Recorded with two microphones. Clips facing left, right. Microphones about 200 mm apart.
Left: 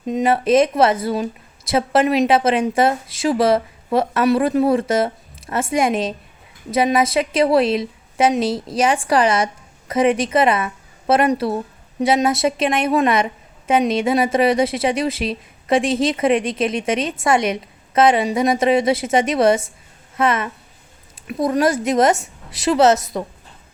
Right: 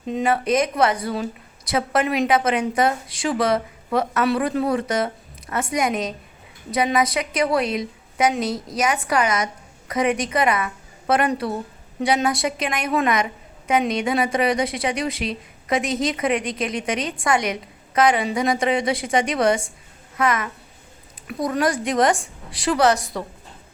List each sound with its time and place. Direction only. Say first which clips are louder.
0.1 s a woman's voice: left 5 dB; 20° left (ahead or behind)